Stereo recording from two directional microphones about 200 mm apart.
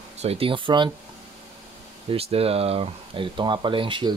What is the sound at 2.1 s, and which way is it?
Speech, 30° right (ahead or behind).